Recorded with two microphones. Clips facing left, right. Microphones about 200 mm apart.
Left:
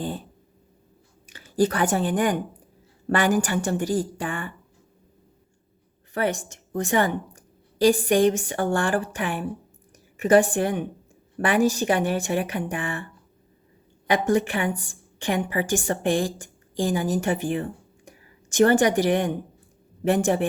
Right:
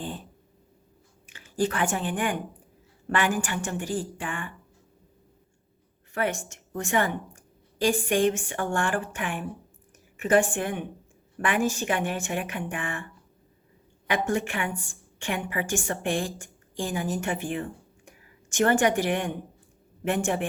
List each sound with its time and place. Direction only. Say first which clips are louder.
1.3 s a woman's voice: left 5 dB; 35° left (ahead or behind)
6.1 s a woman's voice: left 3 dB; 35° left (ahead or behind)
14.1 s a woman's voice: left 5 dB; 35° left (ahead or behind)